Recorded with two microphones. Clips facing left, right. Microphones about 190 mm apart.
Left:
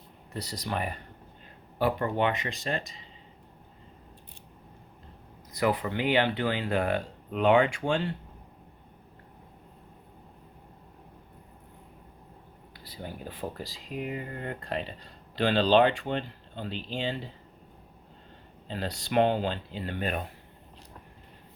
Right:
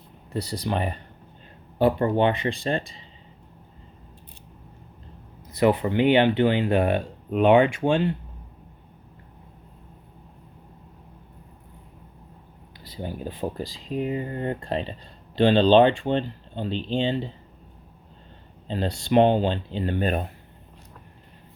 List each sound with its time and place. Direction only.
0.3 s speech: 30° right (ahead or behind)
5.5 s speech: 25° right (ahead or behind)
12.8 s speech: 25° right (ahead or behind)
18.7 s speech: 25° right (ahead or behind)